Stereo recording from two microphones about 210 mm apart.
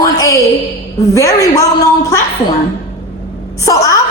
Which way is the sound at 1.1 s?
15° left (ahead or behind).